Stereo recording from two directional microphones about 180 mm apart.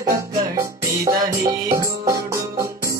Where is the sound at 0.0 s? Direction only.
15° right (ahead or behind).